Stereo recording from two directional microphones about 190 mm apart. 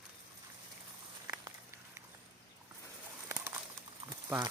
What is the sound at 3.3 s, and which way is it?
Bird, 15° right (ahead or behind).